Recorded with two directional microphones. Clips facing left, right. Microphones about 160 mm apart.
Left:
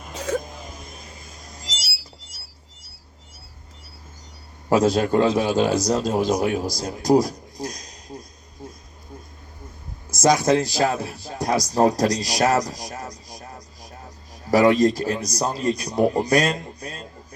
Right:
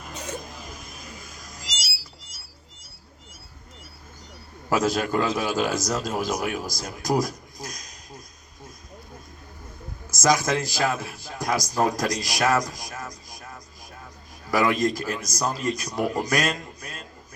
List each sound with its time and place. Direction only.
0.7 s a sound: 25° left (ahead or behind)
4.7 s a man's voice: 30° left (ahead or behind)
10.2 s a man's voice: 30° left (ahead or behind)